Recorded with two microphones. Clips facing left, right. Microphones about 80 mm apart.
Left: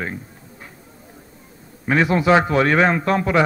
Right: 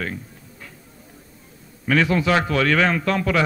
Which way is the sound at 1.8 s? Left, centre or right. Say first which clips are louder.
Left 2 dB; left.